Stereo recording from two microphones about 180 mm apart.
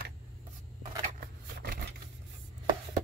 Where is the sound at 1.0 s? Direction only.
55° right (ahead or behind).